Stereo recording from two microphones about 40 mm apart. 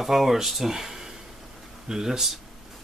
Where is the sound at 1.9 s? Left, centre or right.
Centre.